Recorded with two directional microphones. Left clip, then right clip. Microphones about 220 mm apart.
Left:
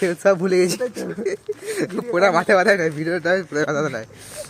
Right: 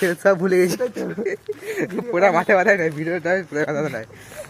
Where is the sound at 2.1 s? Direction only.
15° left (ahead or behind).